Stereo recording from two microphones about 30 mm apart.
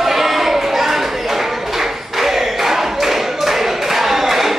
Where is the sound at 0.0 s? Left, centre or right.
Centre.